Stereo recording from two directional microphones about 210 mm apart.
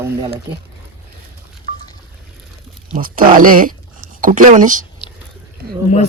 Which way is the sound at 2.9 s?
40° right (ahead or behind).